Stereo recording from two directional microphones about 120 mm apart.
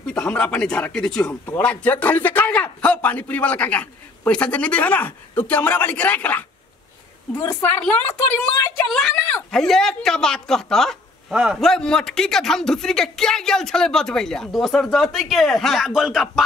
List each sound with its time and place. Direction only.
0.0 s a man's voice: 10° left (ahead or behind)
7.3 s a woman's voice: 25° left (ahead or behind)
8.9 s a man's voice: 5° left (ahead or behind)